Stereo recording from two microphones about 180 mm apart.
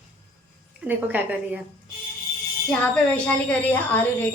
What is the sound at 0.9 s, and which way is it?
Speech, 10° right (ahead or behind).